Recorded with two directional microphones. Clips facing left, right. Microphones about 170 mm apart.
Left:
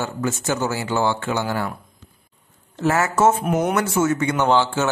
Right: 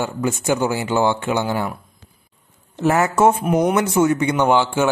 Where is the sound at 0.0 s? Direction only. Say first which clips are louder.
Right 3 dB; 15° right (ahead or behind).